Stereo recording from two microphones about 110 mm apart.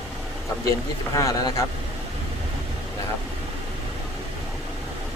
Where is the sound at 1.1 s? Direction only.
30° left (ahead or behind).